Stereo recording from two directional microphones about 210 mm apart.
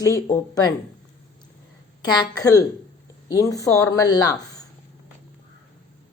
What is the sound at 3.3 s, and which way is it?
Speech, 15° left (ahead or behind).